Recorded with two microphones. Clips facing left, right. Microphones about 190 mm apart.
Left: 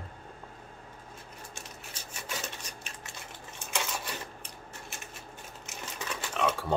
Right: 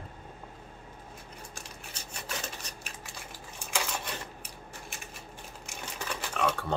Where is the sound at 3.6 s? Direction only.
Centre (ahead or behind).